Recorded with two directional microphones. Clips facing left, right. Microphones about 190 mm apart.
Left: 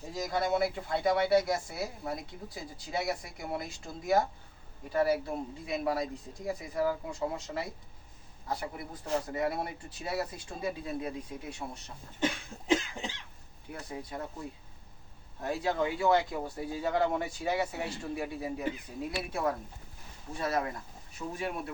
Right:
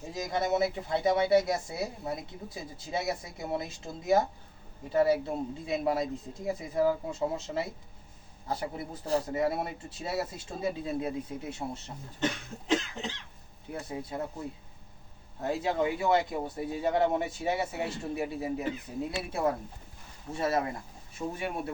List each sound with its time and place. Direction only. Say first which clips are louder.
0.1 s speech: right 1 dB; 20° right (ahead or behind)
12.2 s cough: even; 10° left (ahead or behind)
13.7 s speech: right 4 dB; 25° right (ahead or behind)
15.4 s speech: right 2 dB; 25° right (ahead or behind)